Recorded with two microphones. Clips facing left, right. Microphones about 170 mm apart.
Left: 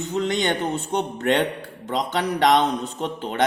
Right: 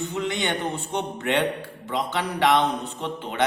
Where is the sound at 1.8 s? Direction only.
40° left (ahead or behind).